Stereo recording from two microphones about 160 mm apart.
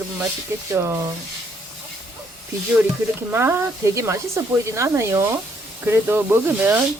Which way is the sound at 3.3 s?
15° right (ahead or behind).